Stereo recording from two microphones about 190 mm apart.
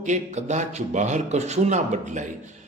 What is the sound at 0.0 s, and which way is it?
A man's voice, 40° right (ahead or behind).